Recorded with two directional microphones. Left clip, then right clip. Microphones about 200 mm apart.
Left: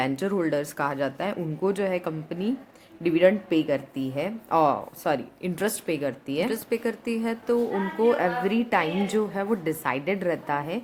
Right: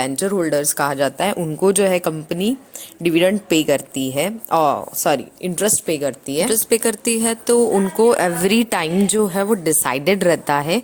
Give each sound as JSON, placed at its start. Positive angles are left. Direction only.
{"t": 0.0, "sound": "speech", "side_deg": -25}
{"t": 6.7, "sound": "speech", "side_deg": -45}